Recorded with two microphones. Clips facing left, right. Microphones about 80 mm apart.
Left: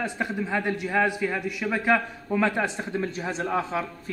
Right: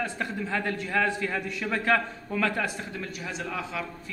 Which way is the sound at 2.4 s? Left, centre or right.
Left.